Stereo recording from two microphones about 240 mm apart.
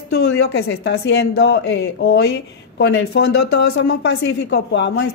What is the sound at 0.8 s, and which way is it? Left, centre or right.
Speech, left.